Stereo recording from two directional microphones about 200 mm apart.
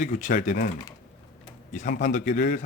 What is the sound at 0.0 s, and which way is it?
Speech, 40° left (ahead or behind).